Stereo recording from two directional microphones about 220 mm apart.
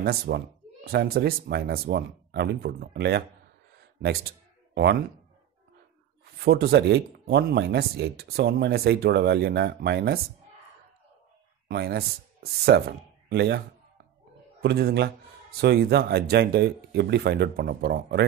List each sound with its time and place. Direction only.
0.0 s speech: 45° right (ahead or behind)
6.3 s speech: 45° right (ahead or behind)
11.6 s speech: 45° right (ahead or behind)
14.6 s speech: 45° right (ahead or behind)